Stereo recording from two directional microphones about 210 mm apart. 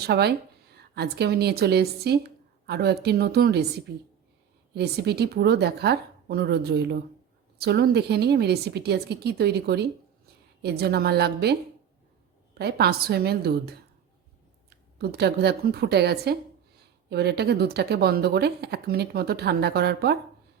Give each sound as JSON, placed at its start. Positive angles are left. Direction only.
{"t": 0.0, "sound": "speech", "side_deg": -50}
{"t": 12.5, "sound": "speech", "side_deg": -50}
{"t": 14.9, "sound": "speech", "side_deg": -50}